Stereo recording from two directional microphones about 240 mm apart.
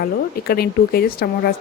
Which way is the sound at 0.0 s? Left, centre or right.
Left.